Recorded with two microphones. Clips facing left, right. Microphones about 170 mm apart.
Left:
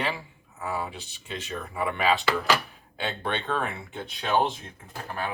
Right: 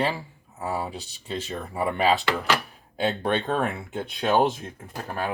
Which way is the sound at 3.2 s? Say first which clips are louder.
Right 2 dB; 40° right (ahead or behind).